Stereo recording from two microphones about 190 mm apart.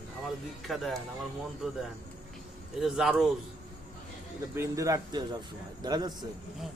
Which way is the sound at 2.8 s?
Centre (ahead or behind).